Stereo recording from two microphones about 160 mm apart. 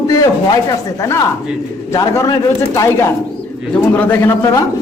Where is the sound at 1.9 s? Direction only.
20° left (ahead or behind).